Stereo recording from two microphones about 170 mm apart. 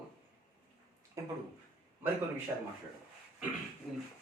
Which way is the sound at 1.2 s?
20° right (ahead or behind).